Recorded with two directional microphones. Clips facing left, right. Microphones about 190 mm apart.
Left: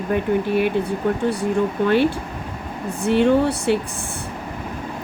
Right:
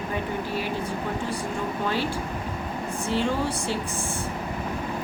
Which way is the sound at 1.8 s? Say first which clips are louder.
Left 10 dB; 60° left (ahead or behind).